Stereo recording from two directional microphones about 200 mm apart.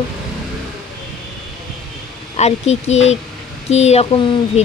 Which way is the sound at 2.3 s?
35° left (ahead or behind).